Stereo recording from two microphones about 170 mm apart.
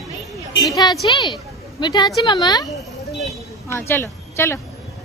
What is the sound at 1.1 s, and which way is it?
A woman's voice, 25° left (ahead or behind).